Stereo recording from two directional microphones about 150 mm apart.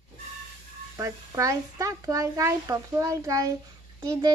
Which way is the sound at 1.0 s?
20° right (ahead or behind).